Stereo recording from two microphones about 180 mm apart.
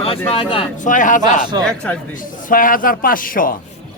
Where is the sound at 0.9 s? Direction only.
45° left (ahead or behind).